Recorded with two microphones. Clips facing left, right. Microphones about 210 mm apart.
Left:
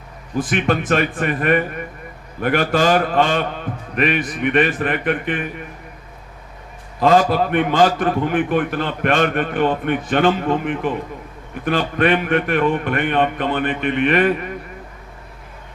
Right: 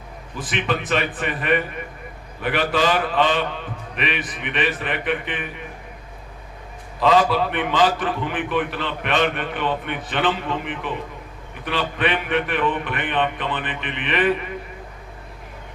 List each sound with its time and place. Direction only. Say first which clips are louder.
0.3 s a man's voice: left 6 dB; 45° left (ahead or behind)
7.0 s a man's voice: left 3 dB; 50° left (ahead or behind)